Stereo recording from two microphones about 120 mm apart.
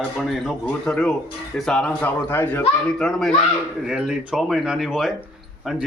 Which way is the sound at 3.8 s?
5° right (ahead or behind).